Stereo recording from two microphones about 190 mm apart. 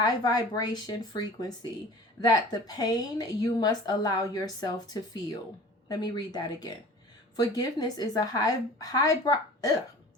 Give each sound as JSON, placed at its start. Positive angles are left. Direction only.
{"t": 0.0, "sound": "a woman's voice", "side_deg": 20}